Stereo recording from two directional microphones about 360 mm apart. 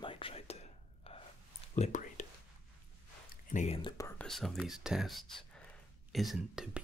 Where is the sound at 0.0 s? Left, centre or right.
Centre.